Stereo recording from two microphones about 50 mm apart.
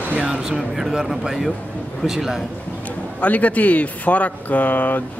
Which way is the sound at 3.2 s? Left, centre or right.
Left.